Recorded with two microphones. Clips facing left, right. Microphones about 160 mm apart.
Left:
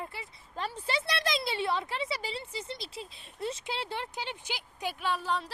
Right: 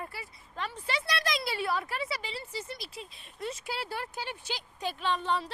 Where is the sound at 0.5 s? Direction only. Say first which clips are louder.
Left 2 dB; 35° left (ahead or behind).